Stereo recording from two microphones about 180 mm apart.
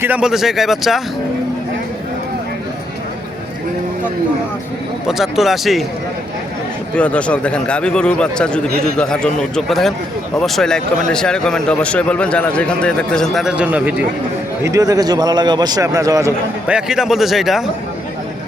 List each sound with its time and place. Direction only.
0.0 s speech: 5° right (ahead or behind)
5.0 s speech: centre (ahead or behind)
6.9 s speech: 5° left (ahead or behind)
14.6 s a man's voice: 20° right (ahead or behind)
16.6 s speech: 5° right (ahead or behind)